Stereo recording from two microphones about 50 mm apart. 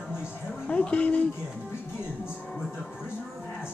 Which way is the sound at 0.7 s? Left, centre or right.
Left.